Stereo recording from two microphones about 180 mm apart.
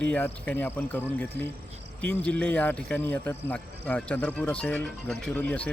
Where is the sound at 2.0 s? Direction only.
10° left (ahead or behind).